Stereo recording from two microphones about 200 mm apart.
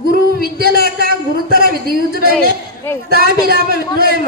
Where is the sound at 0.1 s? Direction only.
50° right (ahead or behind).